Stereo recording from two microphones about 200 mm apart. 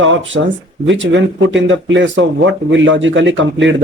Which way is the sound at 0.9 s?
65° right (ahead or behind).